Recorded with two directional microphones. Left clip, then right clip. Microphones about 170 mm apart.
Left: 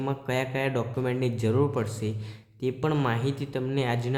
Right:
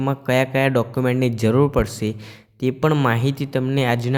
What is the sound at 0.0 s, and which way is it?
Speech, 45° right (ahead or behind).